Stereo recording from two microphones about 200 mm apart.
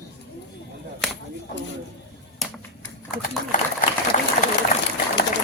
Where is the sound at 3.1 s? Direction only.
40° left (ahead or behind).